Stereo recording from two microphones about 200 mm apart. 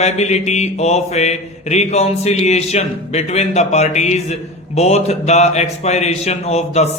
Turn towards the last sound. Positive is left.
turn(degrees=30)  # may be behind; listen again after turning